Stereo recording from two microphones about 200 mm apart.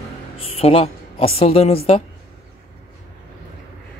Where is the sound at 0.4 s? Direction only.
30° left (ahead or behind).